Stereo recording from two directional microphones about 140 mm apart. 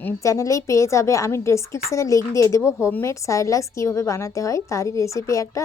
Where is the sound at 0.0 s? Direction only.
20° left (ahead or behind).